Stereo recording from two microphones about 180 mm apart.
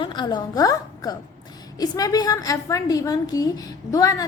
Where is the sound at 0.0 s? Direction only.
25° left (ahead or behind).